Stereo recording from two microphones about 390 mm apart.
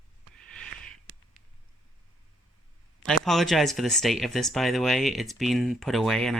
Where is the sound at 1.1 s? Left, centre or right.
Right.